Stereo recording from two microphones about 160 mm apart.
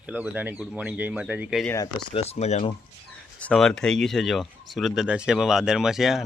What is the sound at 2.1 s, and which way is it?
Speech, 40° left (ahead or behind).